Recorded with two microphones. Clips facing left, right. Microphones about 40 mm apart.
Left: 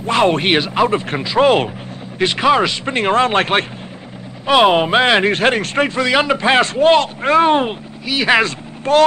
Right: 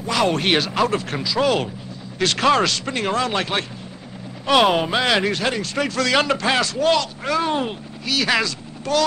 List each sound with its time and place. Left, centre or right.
0.0 s a man's voice: left
2.1 s a man's voice: left
4.5 s speech: centre
4.7 s a man's voice: left
5.9 s a man's voice: left
8.0 s speech: left